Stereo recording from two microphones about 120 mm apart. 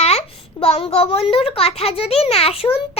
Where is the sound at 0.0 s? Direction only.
60° left (ahead or behind).